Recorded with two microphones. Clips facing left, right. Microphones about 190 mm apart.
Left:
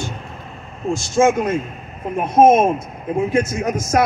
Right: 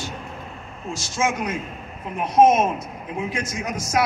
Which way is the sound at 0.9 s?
50° left (ahead or behind).